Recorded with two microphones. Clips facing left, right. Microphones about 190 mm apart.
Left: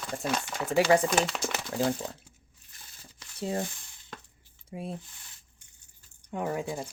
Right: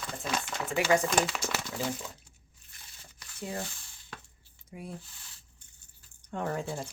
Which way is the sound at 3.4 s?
35° left (ahead or behind).